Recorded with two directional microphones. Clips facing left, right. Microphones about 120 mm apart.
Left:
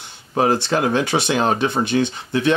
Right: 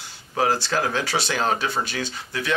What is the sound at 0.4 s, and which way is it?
Speech, 25° left (ahead or behind).